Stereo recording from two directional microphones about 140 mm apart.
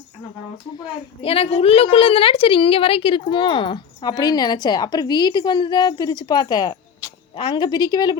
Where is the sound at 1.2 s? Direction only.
45° left (ahead or behind).